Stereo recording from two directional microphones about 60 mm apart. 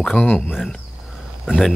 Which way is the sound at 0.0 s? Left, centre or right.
Left.